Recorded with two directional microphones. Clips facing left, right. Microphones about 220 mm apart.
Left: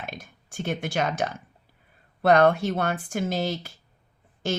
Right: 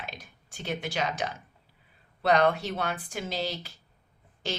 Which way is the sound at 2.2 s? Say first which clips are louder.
Left 5 dB; 50° left (ahead or behind).